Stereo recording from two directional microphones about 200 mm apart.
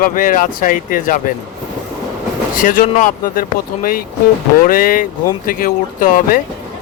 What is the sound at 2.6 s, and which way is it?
Speech, 40° left (ahead or behind).